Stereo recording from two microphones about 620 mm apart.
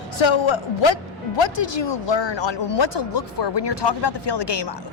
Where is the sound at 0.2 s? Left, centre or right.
Left.